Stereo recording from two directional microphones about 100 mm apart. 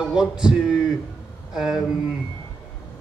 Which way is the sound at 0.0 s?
5° right (ahead or behind).